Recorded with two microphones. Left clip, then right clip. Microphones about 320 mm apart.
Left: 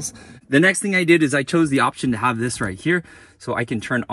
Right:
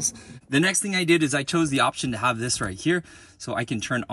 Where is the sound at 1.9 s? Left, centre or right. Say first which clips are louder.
Left 3 dB; left.